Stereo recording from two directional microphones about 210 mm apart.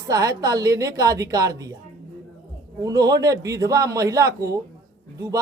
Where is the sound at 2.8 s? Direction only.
15° right (ahead or behind).